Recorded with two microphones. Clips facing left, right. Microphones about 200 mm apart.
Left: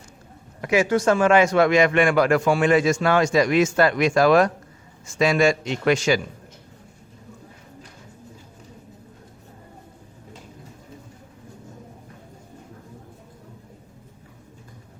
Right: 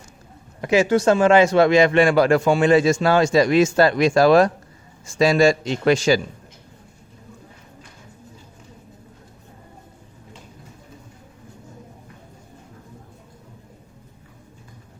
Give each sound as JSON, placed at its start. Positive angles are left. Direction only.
{"t": 0.6, "sound": "a man's voice", "side_deg": -30}